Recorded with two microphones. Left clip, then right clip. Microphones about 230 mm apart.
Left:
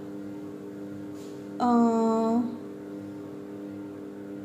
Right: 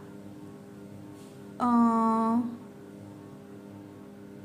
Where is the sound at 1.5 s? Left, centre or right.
Right.